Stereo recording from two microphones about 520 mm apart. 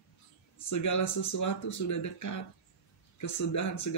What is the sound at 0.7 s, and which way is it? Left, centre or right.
Speech, left.